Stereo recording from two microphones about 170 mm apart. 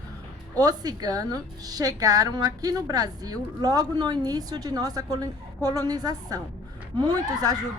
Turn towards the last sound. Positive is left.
turn(degrees=-20)  # may be behind; listen again after turning